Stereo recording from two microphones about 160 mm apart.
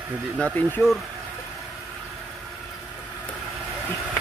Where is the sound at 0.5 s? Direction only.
10° left (ahead or behind).